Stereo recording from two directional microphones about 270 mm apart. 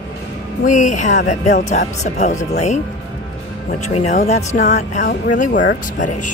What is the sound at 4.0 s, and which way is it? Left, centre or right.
Speech, left.